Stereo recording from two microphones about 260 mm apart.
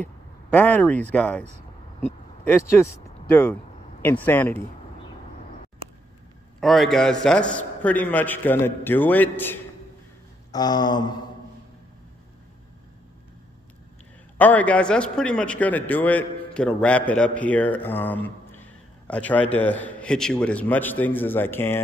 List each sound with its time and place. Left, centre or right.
0.0 s a sound: centre
1.1 s a man's voice: centre
6.6 s a man's voice: centre
14.4 s a man's voice: centre